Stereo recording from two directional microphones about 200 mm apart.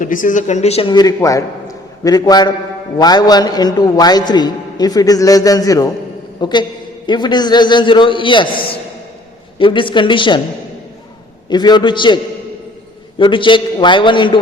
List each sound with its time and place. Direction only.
0.0 s a man's voice: 40° left (ahead or behind); by 10.4 s 25° left (ahead or behind)
11.4 s a man's voice: 20° left (ahead or behind)